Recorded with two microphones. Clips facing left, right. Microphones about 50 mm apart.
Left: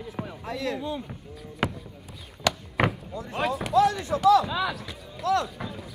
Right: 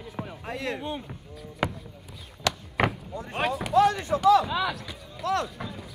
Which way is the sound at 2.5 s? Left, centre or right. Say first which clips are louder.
Left 1 dB; centre.